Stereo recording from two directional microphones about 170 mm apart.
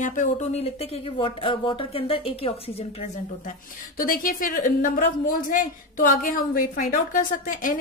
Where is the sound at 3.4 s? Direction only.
55° left (ahead or behind).